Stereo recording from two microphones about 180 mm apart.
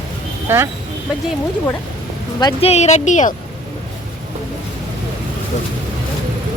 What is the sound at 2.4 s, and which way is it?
Speech, 35° left (ahead or behind).